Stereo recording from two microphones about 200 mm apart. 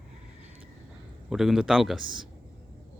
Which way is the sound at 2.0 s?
25° right (ahead or behind).